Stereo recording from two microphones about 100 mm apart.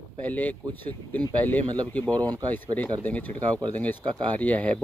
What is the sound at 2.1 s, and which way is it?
Speech, 40° right (ahead or behind).